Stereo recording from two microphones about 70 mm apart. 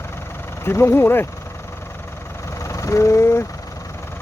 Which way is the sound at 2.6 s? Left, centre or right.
Left.